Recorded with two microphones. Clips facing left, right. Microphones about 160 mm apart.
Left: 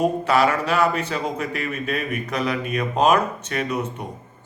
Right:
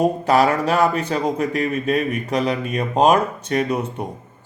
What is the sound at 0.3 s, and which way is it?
A man's voice, 35° right (ahead or behind).